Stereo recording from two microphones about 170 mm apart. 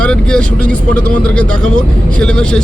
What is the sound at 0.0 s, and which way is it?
Speech, 5° left (ahead or behind).